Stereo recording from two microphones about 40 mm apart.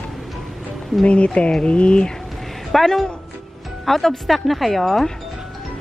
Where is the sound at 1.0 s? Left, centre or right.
Left.